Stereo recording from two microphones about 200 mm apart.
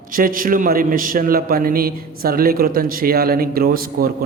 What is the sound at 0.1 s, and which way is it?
A man's voice, 45° right (ahead or behind).